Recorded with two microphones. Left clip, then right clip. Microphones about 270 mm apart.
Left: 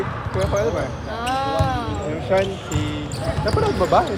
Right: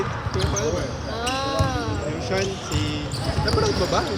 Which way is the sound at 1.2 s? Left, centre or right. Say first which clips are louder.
Left 3 dB; left.